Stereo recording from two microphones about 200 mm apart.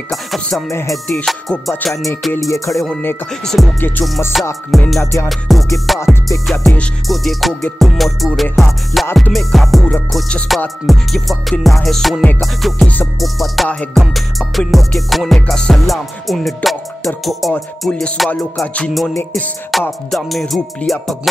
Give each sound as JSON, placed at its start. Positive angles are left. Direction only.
{"t": 0.1, "sound": "music", "side_deg": 0}
{"t": 0.7, "sound": "music", "side_deg": 15}
{"t": 1.0, "sound": "music", "side_deg": 5}
{"t": 2.5, "sound": "music", "side_deg": 15}
{"t": 5.0, "sound": "music", "side_deg": 15}
{"t": 5.3, "sound": "music", "side_deg": 0}